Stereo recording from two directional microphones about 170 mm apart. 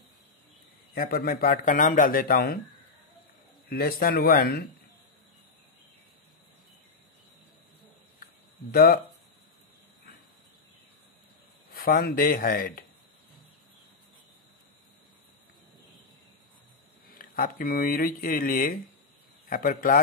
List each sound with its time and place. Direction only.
0.9 s a man's voice: 55° left (ahead or behind)
3.6 s a man's voice: 60° left (ahead or behind)
8.7 s a man's voice: 60° left (ahead or behind)
11.7 s a man's voice: 60° left (ahead or behind)
17.1 s a man's voice: 55° left (ahead or behind)